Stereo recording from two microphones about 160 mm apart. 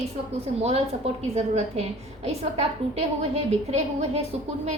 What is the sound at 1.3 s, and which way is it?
A woman's voice, 40° right (ahead or behind).